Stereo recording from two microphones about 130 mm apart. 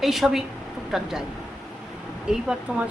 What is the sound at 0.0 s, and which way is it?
Speech, centre (ahead or behind).